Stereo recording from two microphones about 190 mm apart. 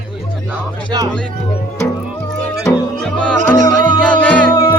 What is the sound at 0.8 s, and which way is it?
Music, 20° right (ahead or behind).